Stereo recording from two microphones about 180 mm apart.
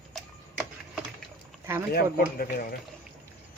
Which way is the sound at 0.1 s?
Centre (ahead or behind).